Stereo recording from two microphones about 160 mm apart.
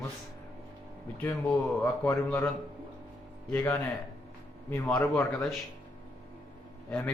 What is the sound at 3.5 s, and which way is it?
A man's voice, 15° left (ahead or behind).